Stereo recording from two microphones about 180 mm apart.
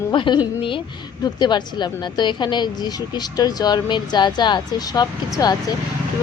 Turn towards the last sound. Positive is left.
turn(degrees=20)  # may be behind; listen again after turning